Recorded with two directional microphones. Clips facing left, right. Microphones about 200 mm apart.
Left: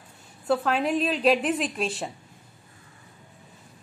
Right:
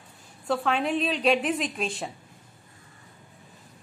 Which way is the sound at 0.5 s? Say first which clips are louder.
Left 2 dB; 5° left (ahead or behind).